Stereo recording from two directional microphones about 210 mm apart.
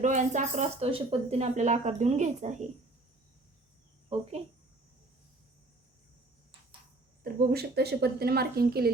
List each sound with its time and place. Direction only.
0.0 s speech: 35° right (ahead or behind)
7.3 s speech: 50° right (ahead or behind)